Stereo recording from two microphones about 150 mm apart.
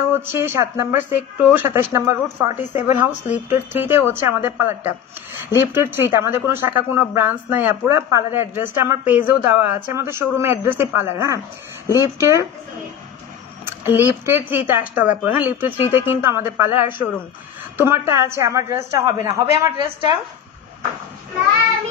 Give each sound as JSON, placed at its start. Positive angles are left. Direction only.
{"t": 0.1, "sound": "a woman's voice", "side_deg": -15}
{"t": 13.7, "sound": "a woman's voice", "side_deg": -15}